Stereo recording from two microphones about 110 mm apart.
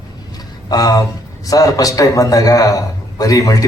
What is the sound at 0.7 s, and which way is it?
A man's voice, 35° left (ahead or behind).